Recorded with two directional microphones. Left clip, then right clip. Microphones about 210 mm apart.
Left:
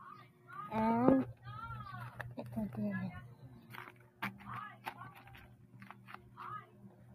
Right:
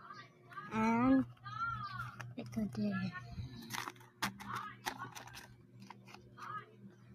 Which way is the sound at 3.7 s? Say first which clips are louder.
Right 7 dB; 30° right (ahead or behind).